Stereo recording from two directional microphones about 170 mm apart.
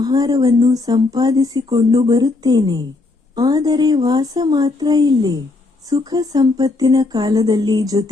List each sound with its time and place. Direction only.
0.0 s speech: 20° right (ahead or behind)